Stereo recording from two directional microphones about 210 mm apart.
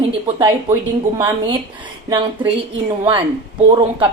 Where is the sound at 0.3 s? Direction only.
20° right (ahead or behind).